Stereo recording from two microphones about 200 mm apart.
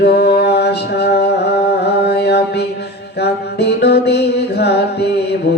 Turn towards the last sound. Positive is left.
turn(degrees=55)  # may be behind; listen again after turning